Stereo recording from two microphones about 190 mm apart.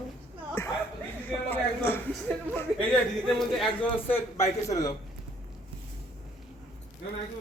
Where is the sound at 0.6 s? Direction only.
15° left (ahead or behind).